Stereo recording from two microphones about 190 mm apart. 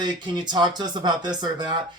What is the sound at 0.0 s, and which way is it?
Speech, 25° right (ahead or behind).